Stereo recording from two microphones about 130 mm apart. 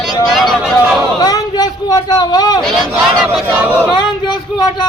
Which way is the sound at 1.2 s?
30° left (ahead or behind).